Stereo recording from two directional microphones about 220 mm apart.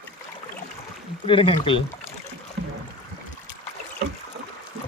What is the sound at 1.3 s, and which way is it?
Speech, 25° left (ahead or behind).